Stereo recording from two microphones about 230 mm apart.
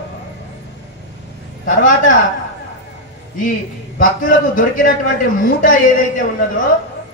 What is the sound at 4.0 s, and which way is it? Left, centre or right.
A man's voice, left.